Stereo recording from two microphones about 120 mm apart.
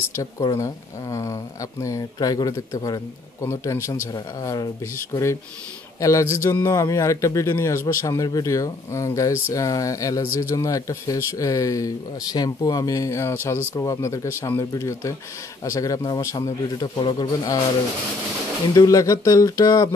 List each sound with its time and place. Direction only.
0.1 s a man's voice: 30° left (ahead or behind)
18.8 s a man's voice: 30° left (ahead or behind)